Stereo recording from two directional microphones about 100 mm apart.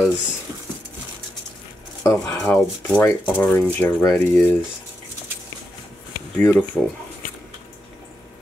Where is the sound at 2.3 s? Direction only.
10° left (ahead or behind).